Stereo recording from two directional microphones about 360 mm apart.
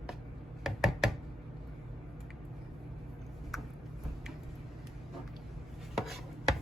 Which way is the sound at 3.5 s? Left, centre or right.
Centre.